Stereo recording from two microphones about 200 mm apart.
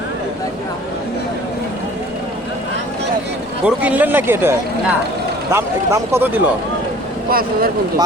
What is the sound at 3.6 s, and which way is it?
Speech, 5° right (ahead or behind).